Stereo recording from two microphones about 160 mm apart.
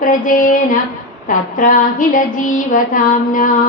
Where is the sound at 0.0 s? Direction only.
55° left (ahead or behind).